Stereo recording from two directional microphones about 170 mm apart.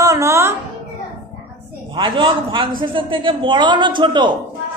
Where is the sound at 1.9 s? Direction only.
25° right (ahead or behind).